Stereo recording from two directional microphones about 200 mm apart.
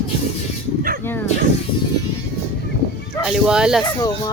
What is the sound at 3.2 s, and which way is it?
Speech, 5° right (ahead or behind).